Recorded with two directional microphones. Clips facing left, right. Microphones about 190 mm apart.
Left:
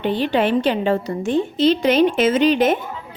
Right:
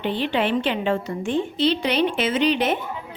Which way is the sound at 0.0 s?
45° left (ahead or behind).